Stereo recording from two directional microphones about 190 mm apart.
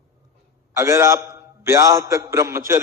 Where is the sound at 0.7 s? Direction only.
15° right (ahead or behind).